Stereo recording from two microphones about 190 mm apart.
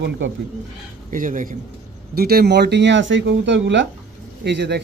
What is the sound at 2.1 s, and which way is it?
A man's voice, 55° right (ahead or behind).